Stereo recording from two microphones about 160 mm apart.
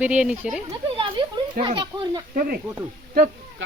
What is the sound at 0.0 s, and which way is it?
Speech, 10° right (ahead or behind).